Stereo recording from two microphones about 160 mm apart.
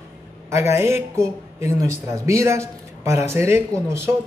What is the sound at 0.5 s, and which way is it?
Speech, 15° right (ahead or behind).